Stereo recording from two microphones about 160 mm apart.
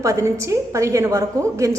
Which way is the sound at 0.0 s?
20° right (ahead or behind).